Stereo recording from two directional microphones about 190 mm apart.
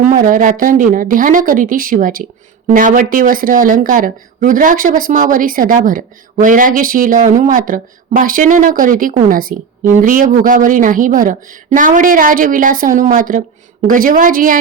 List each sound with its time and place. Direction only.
0.0 s speech: 45° right (ahead or behind)